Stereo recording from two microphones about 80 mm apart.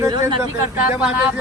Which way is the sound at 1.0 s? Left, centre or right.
Centre.